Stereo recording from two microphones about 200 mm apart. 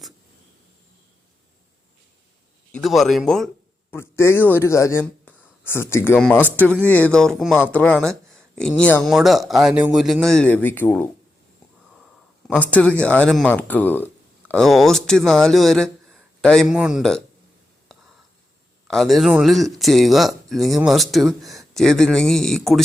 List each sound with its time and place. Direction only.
2.7 s speech: centre (ahead or behind)
3.9 s speech: 15° left (ahead or behind)
12.5 s speech: 10° left (ahead or behind)
18.9 s speech: centre (ahead or behind)